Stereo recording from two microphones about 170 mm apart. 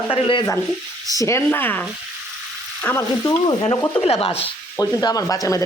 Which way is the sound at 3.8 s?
30° left (ahead or behind).